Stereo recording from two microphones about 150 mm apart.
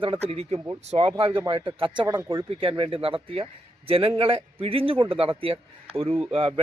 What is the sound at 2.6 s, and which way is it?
Speech, 35° right (ahead or behind).